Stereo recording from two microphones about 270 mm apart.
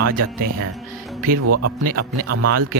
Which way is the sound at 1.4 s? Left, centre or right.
Right.